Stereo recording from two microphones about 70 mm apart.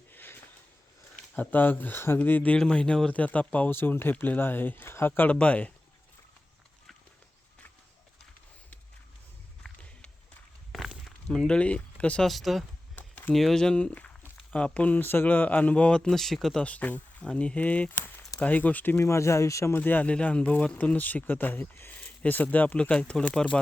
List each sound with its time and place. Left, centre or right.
0.1 s sniff: left
1.4 s speech: left
2.6 s speech: centre
3.7 s speech: left
10.7 s walk: centre
11.3 s speech: centre
12.2 s speech: centre
13.0 s a sound: left
13.3 s speech: centre
16.6 s speech: left
18.9 s speech: left
19.7 s speech: left